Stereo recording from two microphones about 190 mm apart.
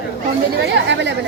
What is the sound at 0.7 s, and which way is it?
Speech, 70° right (ahead or behind).